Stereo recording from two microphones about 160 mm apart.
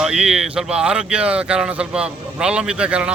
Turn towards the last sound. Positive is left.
turn(degrees=-5)  # may be behind; listen again after turning